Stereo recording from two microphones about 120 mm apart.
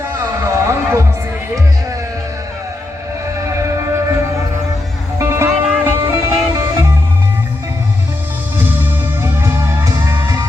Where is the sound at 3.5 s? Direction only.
25° right (ahead or behind).